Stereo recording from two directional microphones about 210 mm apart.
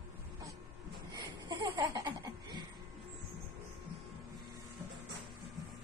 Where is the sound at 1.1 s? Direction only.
20° right (ahead or behind).